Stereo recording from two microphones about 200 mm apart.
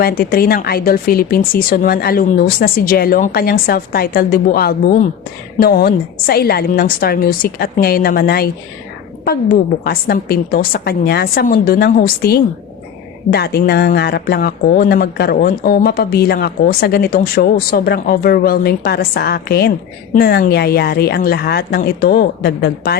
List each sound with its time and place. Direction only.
0.0 s speech: 50° left (ahead or behind)
9.8 s speech: 50° left (ahead or behind)